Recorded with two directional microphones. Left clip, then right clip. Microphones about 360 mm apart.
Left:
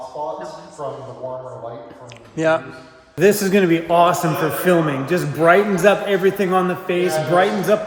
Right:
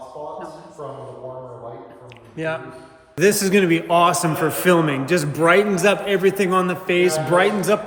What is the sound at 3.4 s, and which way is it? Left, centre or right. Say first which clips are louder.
A man's voice: left 1 dB; centre.